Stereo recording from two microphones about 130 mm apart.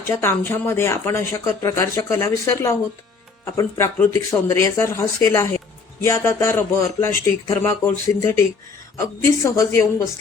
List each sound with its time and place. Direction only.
0.1 s speech: 20° left (ahead or behind)
9.4 s speech: 25° left (ahead or behind)